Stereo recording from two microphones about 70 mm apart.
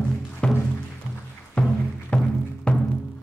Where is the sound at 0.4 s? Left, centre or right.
Centre.